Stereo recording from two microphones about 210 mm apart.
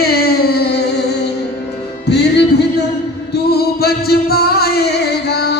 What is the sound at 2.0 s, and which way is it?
Music, 55° left (ahead or behind).